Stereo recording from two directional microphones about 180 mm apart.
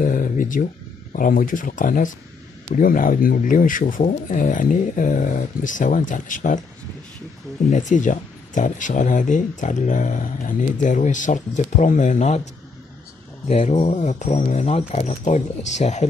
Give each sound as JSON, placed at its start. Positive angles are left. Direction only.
{"t": 0.0, "sound": "a sound", "side_deg": 50}
{"t": 1.1, "sound": "speech", "side_deg": 50}
{"t": 7.7, "sound": "speech", "side_deg": 45}
{"t": 13.5, "sound": "speech", "side_deg": 35}